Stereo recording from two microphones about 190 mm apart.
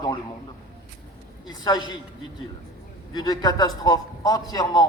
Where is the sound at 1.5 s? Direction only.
20° left (ahead or behind).